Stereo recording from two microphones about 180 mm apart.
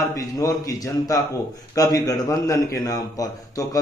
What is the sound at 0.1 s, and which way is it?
A man's voice, 20° left (ahead or behind).